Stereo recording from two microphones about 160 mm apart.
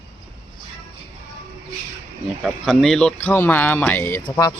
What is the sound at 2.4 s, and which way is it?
Speech, centre (ahead or behind).